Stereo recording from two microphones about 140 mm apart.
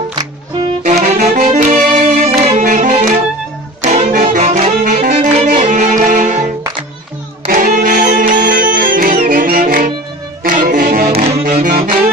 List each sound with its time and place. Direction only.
0.8 s saxophone: 55° right (ahead or behind)
1.2 s music: 70° right (ahead or behind)
2.2 s music: 50° right (ahead or behind)
3.8 s brass instrument: 55° right (ahead or behind)
5.0 s music: 65° right (ahead or behind)
7.4 s music: 75° right (ahead or behind)
10.4 s music: 70° right (ahead or behind)
11.1 s music: 45° right (ahead or behind)
11.4 s music: 80° right